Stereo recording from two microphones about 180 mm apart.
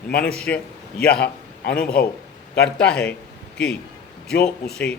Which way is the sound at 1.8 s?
55° left (ahead or behind).